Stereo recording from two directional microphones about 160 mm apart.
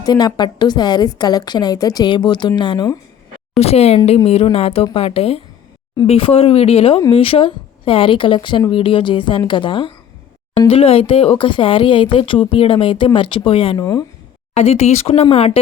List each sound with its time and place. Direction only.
0.0 s a woman's voice: 25° left (ahead or behind)
3.6 s speech: 40° left (ahead or behind)
13.7 s a woman's voice: 20° left (ahead or behind)
14.5 s speech: 40° left (ahead or behind)